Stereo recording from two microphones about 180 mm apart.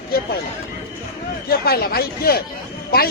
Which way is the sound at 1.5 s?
60° left (ahead or behind).